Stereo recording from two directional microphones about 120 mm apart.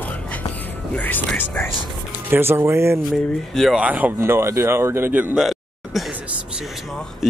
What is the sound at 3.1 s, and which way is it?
Speech, centre (ahead or behind).